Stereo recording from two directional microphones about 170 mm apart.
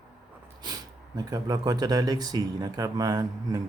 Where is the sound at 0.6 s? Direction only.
25° right (ahead or behind).